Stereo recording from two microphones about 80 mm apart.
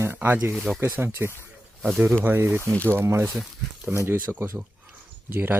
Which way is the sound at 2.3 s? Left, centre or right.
Right.